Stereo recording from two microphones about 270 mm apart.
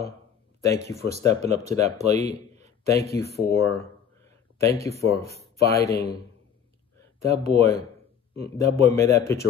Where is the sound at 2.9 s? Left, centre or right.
Centre.